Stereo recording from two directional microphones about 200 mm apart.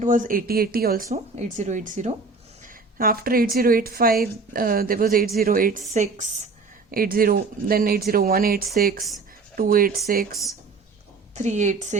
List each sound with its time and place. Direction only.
0.0 s speech: 40° right (ahead or behind)
1.1 s speech: 35° right (ahead or behind)
5.9 s speech: 35° right (ahead or behind)
6.9 s speech: 45° right (ahead or behind)
10.3 s speech: centre (ahead or behind)
11.3 s speech: 35° right (ahead or behind)